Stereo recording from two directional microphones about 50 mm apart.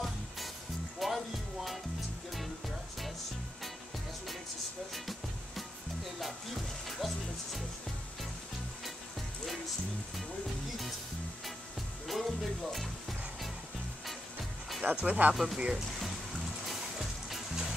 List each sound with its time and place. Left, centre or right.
0.9 s music: centre
6.1 s music: centre
12.1 s music: centre
14.8 s speech: right
15.3 s speech: centre
16.6 s music: centre